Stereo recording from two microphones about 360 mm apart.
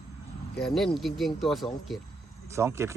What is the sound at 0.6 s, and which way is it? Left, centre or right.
Speech, centre.